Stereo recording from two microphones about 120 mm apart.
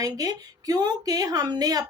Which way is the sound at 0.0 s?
30° right (ahead or behind).